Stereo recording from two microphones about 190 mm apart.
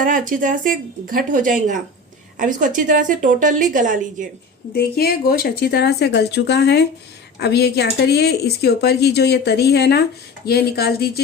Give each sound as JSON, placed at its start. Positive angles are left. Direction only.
{"t": 0.0, "sound": "a woman's voice", "side_deg": -45}
{"t": 4.7, "sound": "speech", "side_deg": 55}